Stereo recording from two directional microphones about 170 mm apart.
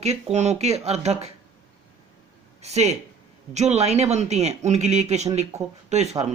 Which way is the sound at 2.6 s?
40° right (ahead or behind).